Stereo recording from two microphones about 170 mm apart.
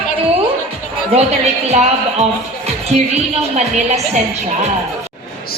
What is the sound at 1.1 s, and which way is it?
Speech, 40° right (ahead or behind).